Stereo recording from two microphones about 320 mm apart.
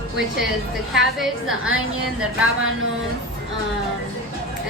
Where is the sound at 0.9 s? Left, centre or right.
Centre.